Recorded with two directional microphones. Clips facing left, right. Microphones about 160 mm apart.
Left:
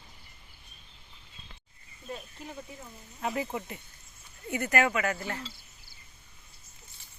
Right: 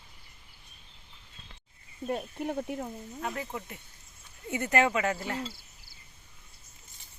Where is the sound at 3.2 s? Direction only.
5° left (ahead or behind).